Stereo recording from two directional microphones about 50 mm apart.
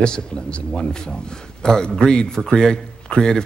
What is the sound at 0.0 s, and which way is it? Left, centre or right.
A man's voice, centre.